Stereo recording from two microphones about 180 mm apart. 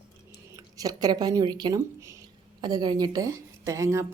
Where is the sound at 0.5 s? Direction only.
20° right (ahead or behind).